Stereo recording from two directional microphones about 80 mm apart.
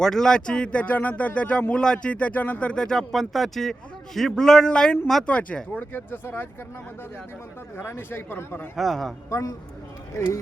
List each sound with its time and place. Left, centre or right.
0.0 s speech: centre
6.1 s speech: left
7.8 s speech: left
8.7 s a man's voice: centre
9.3 s speech: left